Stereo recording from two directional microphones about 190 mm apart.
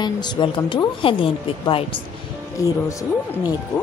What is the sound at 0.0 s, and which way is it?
A woman's voice, 25° left (ahead or behind).